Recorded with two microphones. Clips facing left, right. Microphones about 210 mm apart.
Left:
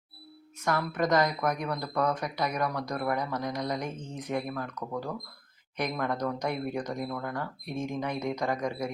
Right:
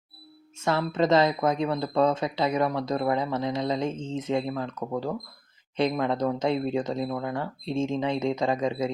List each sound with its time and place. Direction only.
0.6 s speech: 25° right (ahead or behind)